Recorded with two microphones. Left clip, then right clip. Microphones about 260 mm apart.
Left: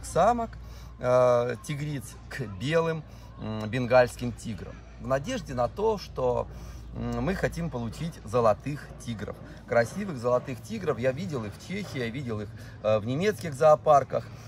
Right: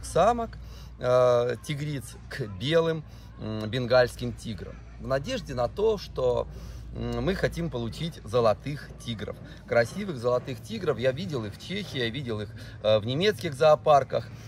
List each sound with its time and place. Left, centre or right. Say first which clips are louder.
0.1 s speech: even; centre